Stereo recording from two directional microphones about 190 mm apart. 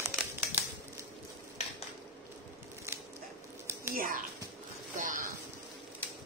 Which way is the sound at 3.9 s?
45° right (ahead or behind).